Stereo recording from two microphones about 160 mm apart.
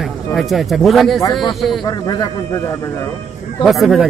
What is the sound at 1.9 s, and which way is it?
Speech, 25° left (ahead or behind).